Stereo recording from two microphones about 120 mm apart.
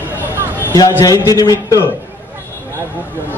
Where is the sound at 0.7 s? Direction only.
30° left (ahead or behind).